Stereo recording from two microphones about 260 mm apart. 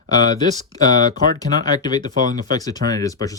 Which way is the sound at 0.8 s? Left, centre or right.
Centre.